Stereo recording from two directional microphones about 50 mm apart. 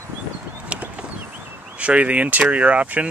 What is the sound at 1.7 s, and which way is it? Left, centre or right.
Speech, right.